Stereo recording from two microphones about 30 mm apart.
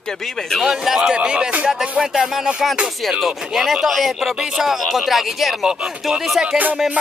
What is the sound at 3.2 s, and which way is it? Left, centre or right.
Speech, centre.